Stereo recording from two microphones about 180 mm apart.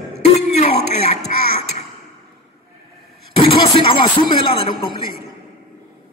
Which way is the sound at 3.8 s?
30° left (ahead or behind).